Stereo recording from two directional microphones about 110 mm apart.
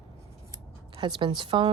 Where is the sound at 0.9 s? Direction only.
45° right (ahead or behind).